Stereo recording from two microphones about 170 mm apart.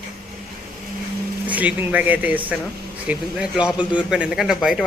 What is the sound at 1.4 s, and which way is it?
Speech, 10° right (ahead or behind).